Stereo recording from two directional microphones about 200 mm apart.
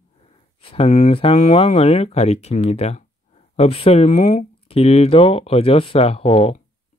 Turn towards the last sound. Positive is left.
turn(degrees=30)  # may be behind; listen again after turning